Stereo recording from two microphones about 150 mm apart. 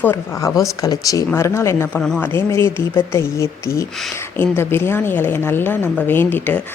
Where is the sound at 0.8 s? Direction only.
25° left (ahead or behind).